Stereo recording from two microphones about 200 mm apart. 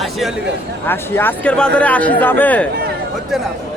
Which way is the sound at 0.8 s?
10° left (ahead or behind).